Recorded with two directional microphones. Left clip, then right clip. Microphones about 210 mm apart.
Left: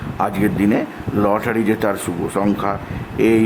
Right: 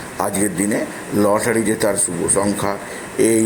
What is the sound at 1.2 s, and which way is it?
Speech, 5° left (ahead or behind).